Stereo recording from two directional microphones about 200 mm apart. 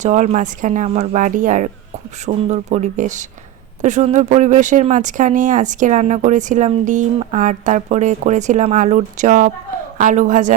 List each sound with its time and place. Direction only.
0.0 s speech: 35° right (ahead or behind)